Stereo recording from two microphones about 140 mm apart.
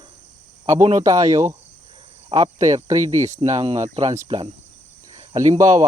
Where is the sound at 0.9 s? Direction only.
25° right (ahead or behind).